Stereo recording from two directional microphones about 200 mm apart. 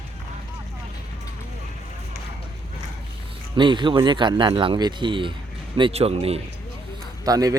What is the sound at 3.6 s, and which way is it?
Speech, 25° right (ahead or behind).